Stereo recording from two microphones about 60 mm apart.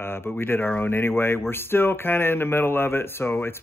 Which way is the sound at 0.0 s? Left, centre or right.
Left.